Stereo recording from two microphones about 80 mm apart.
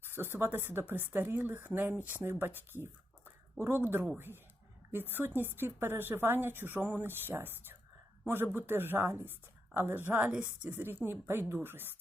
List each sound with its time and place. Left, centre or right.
0.0 s a woman's voice: right
2.7 s a sound: right
3.6 s a woman's voice: right